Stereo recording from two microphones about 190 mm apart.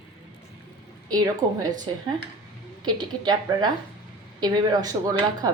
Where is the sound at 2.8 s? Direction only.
20° right (ahead or behind).